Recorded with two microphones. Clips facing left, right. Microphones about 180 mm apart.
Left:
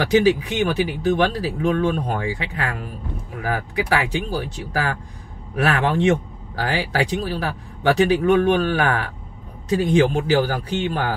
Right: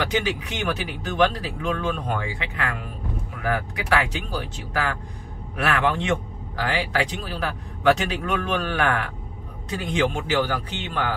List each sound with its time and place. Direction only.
0.1 s speech: 35° left (ahead or behind)
4.1 s speech: 30° left (ahead or behind)